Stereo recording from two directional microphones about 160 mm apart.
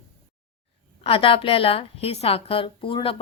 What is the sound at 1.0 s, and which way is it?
A woman's voice, 35° left (ahead or behind).